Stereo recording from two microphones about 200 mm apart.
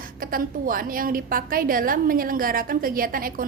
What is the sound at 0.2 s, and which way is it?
A woman's voice, 45° right (ahead or behind).